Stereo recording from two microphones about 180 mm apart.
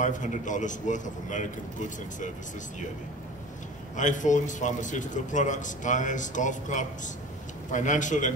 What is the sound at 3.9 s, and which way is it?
A man's voice, 45° left (ahead or behind).